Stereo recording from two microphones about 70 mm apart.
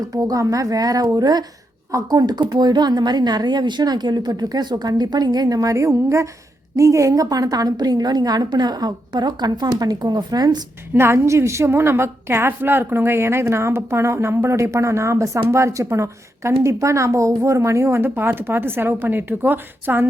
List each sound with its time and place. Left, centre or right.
0.1 s speech: right
1.1 s a woman's voice: right
1.9 s a woman's voice: right
10.9 s a woman's voice: right